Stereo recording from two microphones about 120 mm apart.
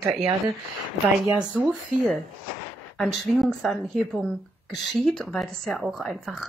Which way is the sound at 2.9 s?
Centre (ahead or behind).